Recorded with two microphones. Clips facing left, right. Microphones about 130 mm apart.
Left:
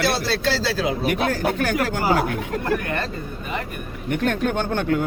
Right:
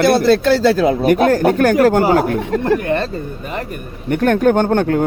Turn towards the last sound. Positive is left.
turn(degrees=-45)  # may be behind; listen again after turning